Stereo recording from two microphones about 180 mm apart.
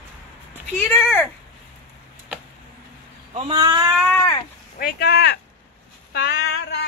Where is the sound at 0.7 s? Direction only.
10° left (ahead or behind).